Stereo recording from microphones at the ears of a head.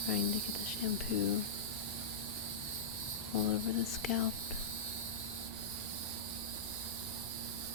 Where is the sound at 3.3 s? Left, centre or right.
Left.